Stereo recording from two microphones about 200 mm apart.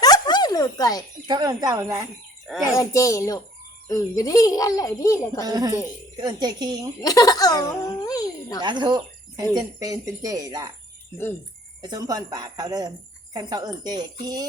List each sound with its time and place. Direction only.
0.0 s a sound: 20° left (ahead or behind)
1.3 s speech: 20° right (ahead or behind)
2.6 s speech: 15° left (ahead or behind)
5.5 s speech: 20° right (ahead or behind)
7.0 s speech: 20° left (ahead or behind)
8.6 s speech: 25° right (ahead or behind)
11.8 s speech: 20° right (ahead or behind)